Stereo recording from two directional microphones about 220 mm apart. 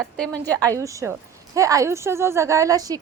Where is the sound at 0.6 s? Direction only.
15° right (ahead or behind).